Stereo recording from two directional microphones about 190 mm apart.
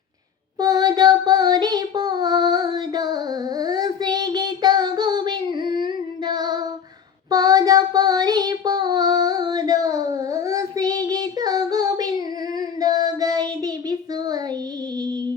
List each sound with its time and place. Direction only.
0.6 s child singing: 20° right (ahead or behind)
12.5 s singing: 20° right (ahead or behind)
13.1 s child singing: 20° right (ahead or behind)